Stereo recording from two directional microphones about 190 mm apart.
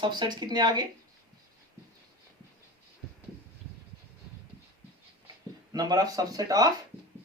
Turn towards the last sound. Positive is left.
turn(degrees=-20)  # may be behind; listen again after turning